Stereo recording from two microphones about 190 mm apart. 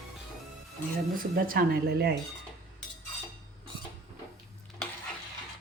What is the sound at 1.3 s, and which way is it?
Speech, 50° right (ahead or behind).